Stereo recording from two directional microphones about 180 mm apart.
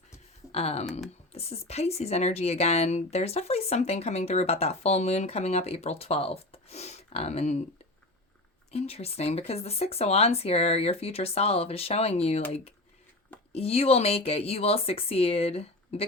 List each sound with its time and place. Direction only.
0.5 s speech: 35° left (ahead or behind)
8.7 s speech: 35° left (ahead or behind)
13.5 s speech: 35° left (ahead or behind)